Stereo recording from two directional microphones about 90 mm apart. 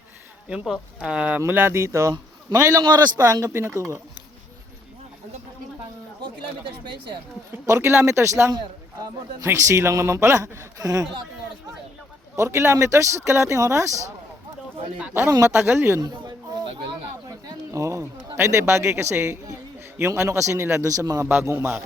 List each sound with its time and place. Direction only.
0.6 s speech: 5° right (ahead or behind)
1.4 s a man's voice: 25° right (ahead or behind)
2.8 s a man's voice: 50° right (ahead or behind)
7.7 s a man's voice: 25° right (ahead or behind)
12.4 s a man's voice: 30° right (ahead or behind)
15.3 s a man's voice: 35° right (ahead or behind)
15.5 s speech: 25° right (ahead or behind)
16.0 s a sound: 50° right (ahead or behind)
17.7 s a sound: 35° right (ahead or behind)
20.0 s a man's voice: 30° right (ahead or behind)